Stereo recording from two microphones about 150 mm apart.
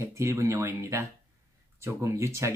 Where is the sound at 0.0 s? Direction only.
20° right (ahead or behind).